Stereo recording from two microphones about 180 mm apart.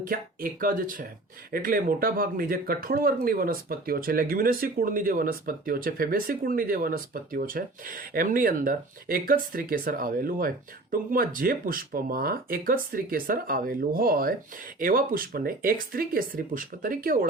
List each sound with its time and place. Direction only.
0.0 s speech: 50° right (ahead or behind)